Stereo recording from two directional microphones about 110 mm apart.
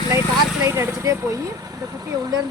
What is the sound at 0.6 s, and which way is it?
Speech, 25° right (ahead or behind).